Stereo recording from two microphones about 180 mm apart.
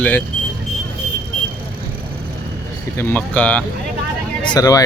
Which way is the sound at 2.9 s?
10° left (ahead or behind).